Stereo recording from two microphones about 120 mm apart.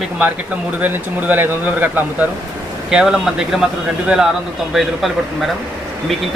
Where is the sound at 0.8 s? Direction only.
15° right (ahead or behind).